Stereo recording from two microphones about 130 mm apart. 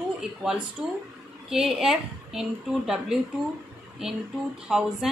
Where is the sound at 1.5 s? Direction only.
5° right (ahead or behind).